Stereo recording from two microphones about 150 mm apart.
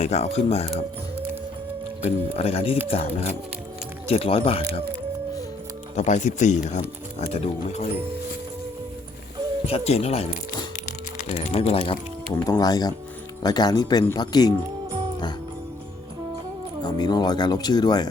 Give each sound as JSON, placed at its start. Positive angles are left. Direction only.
{"t": 0.0, "sound": "speech", "side_deg": 45}
{"t": 2.0, "sound": "speech", "side_deg": 45}
{"t": 6.0, "sound": "speech", "side_deg": 55}
{"t": 9.6, "sound": "speech", "side_deg": 45}
{"t": 11.3, "sound": "speech", "side_deg": 45}
{"t": 12.3, "sound": "speech", "side_deg": 25}
{"t": 16.8, "sound": "speech", "side_deg": 25}